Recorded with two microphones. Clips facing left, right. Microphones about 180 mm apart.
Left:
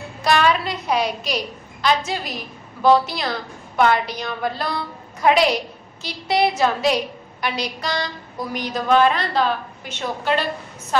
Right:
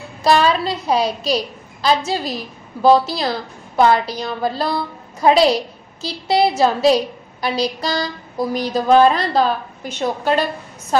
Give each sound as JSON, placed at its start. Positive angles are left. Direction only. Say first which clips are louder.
{"t": 0.2, "sound": "a woman's voice", "louder": "right 3 dB", "side_deg": -30}